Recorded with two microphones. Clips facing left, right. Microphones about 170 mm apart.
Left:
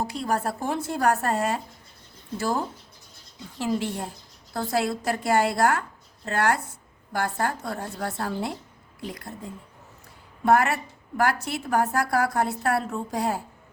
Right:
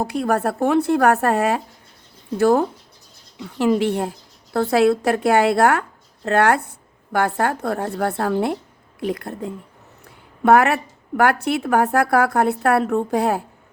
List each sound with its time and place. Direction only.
0.0 s a woman's voice: 55° right (ahead or behind)